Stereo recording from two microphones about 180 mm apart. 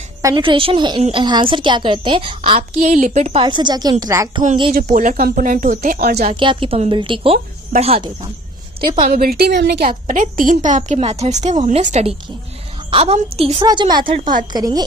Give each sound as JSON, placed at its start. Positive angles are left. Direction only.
{"t": 0.2, "sound": "a woman's voice", "side_deg": -20}
{"t": 3.4, "sound": "a woman's voice", "side_deg": -25}
{"t": 4.7, "sound": "a woman's voice", "side_deg": -50}
{"t": 6.3, "sound": "a woman's voice", "side_deg": -25}
{"t": 9.0, "sound": "a woman's voice", "side_deg": -55}
{"t": 10.1, "sound": "a woman's voice", "side_deg": -50}